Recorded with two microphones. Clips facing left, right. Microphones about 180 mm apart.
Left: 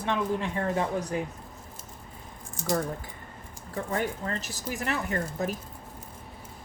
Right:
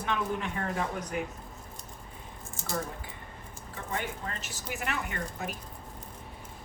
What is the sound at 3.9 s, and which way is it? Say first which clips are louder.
Speech: left 5 dB; 40° left (ahead or behind).